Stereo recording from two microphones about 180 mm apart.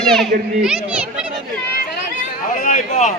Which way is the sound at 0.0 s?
Centre (ahead or behind).